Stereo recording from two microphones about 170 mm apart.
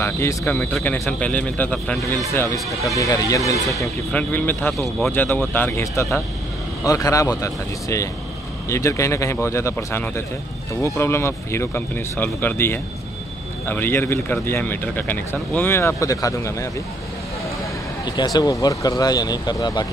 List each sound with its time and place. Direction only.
0.0 s a man's voice: 15° left (ahead or behind)
18.0 s speech: 25° left (ahead or behind)